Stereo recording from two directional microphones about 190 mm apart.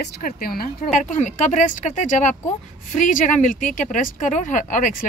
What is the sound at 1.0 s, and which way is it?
A woman's voice, 40° left (ahead or behind).